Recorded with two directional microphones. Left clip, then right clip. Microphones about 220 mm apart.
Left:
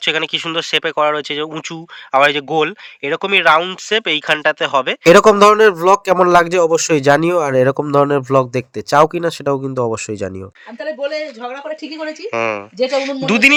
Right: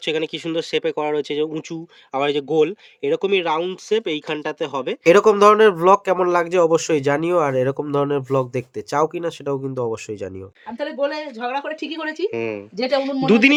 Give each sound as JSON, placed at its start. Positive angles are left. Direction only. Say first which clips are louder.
{"t": 0.0, "sound": "speech", "louder": "left 6 dB", "side_deg": -5}
{"t": 5.0, "sound": "speech", "louder": "left 4 dB", "side_deg": 20}
{"t": 12.3, "sound": "speech", "louder": "left 7 dB", "side_deg": 0}